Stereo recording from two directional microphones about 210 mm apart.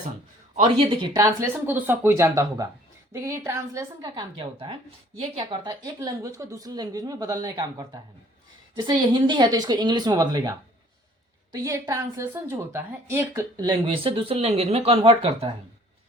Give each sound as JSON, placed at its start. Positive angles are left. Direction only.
{"t": 0.5, "sound": "a woman's voice", "side_deg": -25}
{"t": 11.5, "sound": "a woman's voice", "side_deg": -15}